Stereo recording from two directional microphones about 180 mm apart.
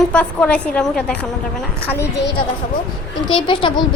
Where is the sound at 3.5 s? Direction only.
25° left (ahead or behind).